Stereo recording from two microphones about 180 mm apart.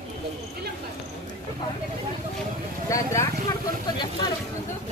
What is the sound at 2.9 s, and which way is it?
Speech, 15° left (ahead or behind).